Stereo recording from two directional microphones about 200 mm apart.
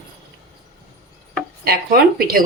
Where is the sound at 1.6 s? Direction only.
50° right (ahead or behind).